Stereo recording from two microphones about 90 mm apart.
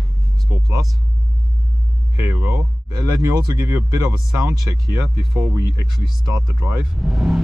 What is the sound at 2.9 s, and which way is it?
Speech, 45° right (ahead or behind).